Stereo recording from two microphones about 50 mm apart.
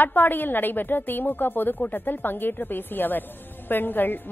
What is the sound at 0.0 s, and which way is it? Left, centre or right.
A woman's voice, left.